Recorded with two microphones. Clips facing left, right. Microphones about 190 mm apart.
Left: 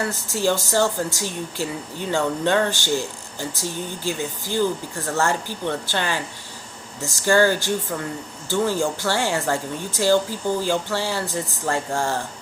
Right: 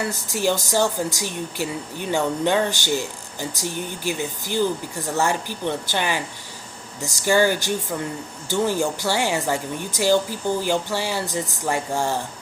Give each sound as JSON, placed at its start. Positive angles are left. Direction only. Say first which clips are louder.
{"t": 0.1, "sound": "a woman's voice", "louder": "left 1 dB", "side_deg": -15}